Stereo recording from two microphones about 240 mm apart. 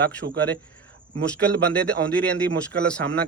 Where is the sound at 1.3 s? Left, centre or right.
Centre.